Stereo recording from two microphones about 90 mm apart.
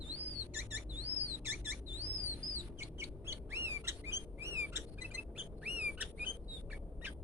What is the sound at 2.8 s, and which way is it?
Bird, 30° right (ahead or behind).